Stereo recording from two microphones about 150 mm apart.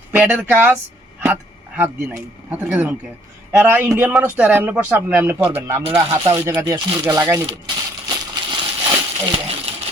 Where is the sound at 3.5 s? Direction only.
15° right (ahead or behind).